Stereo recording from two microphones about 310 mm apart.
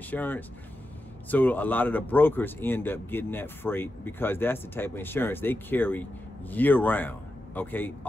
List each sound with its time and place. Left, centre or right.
0.1 s a man's voice: centre